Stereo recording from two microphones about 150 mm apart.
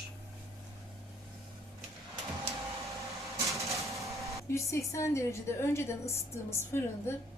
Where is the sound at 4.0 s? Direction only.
20° right (ahead or behind).